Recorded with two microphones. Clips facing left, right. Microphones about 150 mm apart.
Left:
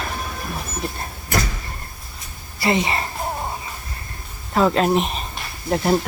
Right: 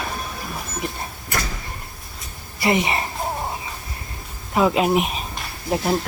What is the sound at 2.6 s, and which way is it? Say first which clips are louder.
Speech: even; 20° right (ahead or behind).